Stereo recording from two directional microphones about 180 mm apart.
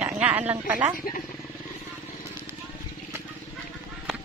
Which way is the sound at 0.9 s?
50° left (ahead or behind).